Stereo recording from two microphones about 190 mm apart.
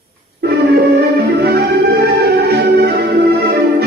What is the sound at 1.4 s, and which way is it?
Music, 55° right (ahead or behind).